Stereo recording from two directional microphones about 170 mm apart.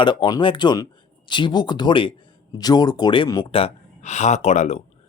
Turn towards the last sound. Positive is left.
turn(degrees=40)  # may be behind; listen again after turning